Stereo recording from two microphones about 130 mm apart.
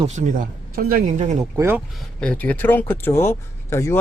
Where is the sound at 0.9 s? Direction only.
90° right.